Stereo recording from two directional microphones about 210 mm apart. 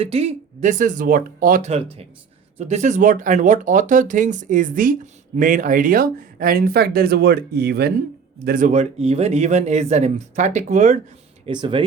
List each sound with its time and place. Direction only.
0.0 s speech: 30° right (ahead or behind); by 8.0 s 50° right (ahead or behind)
8.4 s speech: 40° right (ahead or behind)
11.4 s speech: 25° right (ahead or behind)